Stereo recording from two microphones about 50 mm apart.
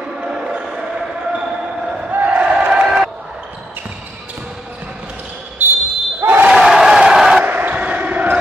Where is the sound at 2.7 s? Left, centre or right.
Centre.